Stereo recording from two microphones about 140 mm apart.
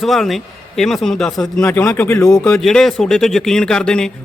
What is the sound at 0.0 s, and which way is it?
A man's voice, centre (ahead or behind).